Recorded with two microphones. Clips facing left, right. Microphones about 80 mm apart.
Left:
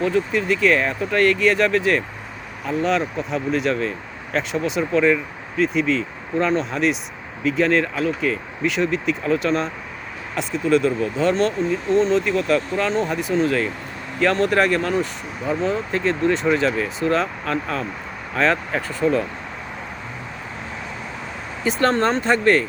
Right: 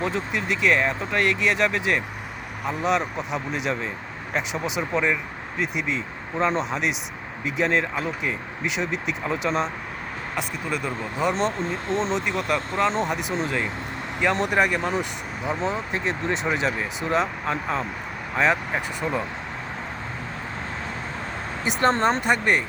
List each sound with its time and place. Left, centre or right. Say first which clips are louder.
0.0 s speech: left 6 dB; right
21.6 s speech: left 2 dB; right